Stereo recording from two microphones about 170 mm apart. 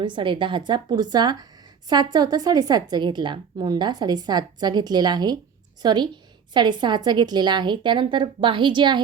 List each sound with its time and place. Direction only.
0.0 s speech: 30° right (ahead or behind)